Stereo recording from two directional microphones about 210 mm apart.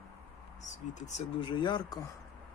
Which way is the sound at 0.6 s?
35° left (ahead or behind).